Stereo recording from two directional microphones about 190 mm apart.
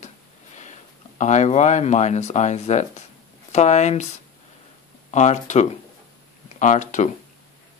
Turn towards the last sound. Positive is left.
turn(degrees=40)  # may be behind; listen again after turning